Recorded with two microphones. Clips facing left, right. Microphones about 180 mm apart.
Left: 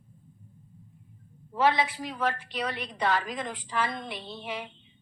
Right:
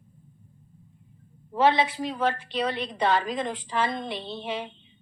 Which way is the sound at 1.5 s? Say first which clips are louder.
Right 3 dB; 25° right (ahead or behind).